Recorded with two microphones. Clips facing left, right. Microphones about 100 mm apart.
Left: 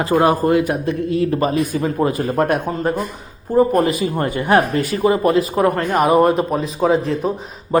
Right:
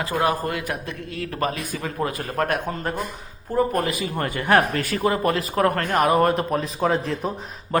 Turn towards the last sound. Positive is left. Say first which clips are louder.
# left 6 dB
turn(degrees=5)  # may be behind; listen again after turning